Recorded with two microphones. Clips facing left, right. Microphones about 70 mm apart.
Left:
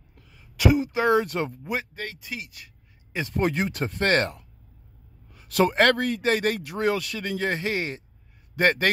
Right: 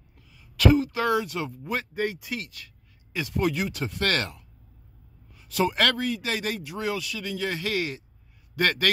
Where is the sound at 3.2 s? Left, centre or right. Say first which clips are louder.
Left 1 dB; left.